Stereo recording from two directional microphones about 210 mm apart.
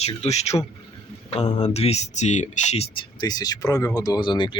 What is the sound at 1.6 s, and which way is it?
Speech, 30° left (ahead or behind).